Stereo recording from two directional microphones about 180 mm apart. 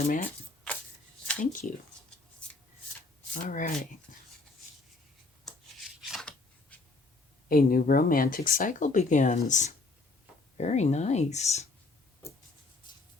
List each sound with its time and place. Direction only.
0.0 s speech: 50° left (ahead or behind)
3.3 s speech: 45° left (ahead or behind)
6.0 s a sound: centre (ahead or behind)
7.4 s speech: 55° left (ahead or behind); by 11.6 s 40° left (ahead or behind)